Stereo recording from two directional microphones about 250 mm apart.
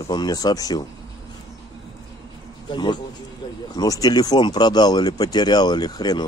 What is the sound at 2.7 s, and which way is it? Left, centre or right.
A man's voice, centre.